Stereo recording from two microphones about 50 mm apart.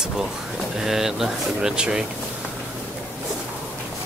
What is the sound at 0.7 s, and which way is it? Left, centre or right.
Speech, centre.